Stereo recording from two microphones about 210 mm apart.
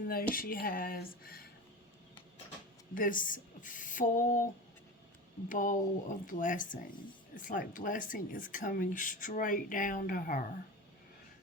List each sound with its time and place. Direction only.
0.1 s speech: 45° left (ahead or behind)
2.9 s speech: 40° left (ahead or behind)
5.5 s speech: 40° left (ahead or behind)